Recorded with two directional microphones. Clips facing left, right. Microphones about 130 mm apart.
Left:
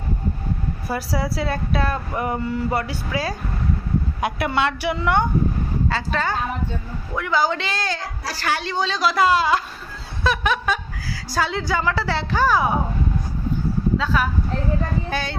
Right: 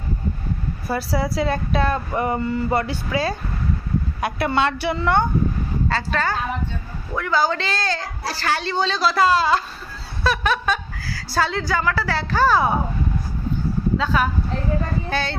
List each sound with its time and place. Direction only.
0.8 s a woman's voice: 10° left (ahead or behind)
13.9 s speech: centre (ahead or behind)
15.0 s a woman's voice: 15° left (ahead or behind)